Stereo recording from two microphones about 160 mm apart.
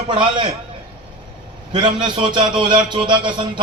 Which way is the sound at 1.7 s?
30° right (ahead or behind).